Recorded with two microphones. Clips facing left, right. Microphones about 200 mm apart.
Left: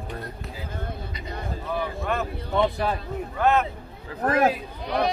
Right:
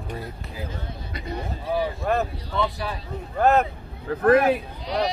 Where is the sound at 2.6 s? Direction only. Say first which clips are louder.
Left 4 dB; 50° left (ahead or behind).